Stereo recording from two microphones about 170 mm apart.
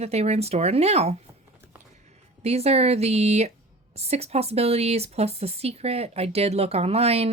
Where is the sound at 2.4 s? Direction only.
35° right (ahead or behind).